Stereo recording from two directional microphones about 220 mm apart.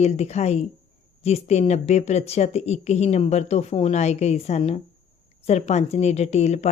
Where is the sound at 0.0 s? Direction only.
30° left (ahead or behind).